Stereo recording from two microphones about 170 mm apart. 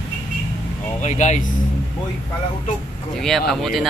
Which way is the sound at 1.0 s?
45° left (ahead or behind).